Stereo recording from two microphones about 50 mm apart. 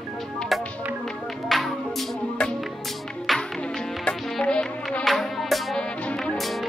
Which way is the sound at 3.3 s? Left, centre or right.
Centre.